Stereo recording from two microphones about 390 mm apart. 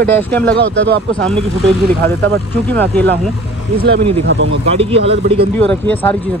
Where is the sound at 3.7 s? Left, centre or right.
Right.